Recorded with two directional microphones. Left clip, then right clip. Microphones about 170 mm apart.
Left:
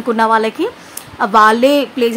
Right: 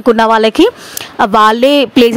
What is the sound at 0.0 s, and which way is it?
A woman's voice, 50° right (ahead or behind).